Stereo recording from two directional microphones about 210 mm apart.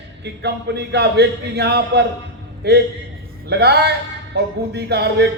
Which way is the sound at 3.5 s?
50° right (ahead or behind).